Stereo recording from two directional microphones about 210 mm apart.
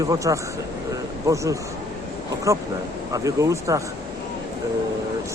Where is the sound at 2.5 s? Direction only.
15° right (ahead or behind).